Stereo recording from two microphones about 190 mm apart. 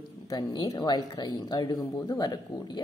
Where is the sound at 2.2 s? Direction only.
20° left (ahead or behind).